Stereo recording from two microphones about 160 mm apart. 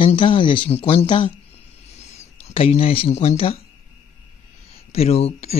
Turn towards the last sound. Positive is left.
turn(degrees=40)  # may be behind; listen again after turning